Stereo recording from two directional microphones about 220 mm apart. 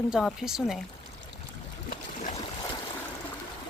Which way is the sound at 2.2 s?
30° left (ahead or behind).